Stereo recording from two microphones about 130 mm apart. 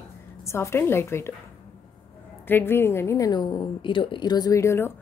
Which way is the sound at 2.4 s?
15° left (ahead or behind).